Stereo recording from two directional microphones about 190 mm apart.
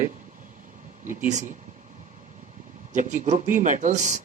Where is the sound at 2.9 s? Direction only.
40° right (ahead or behind).